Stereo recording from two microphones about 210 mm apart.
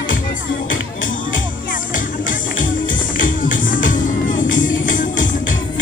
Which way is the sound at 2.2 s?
40° left (ahead or behind).